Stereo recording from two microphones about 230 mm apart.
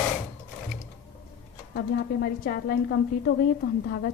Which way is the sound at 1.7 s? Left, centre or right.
Left.